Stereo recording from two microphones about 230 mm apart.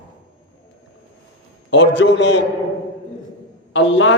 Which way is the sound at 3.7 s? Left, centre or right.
Left.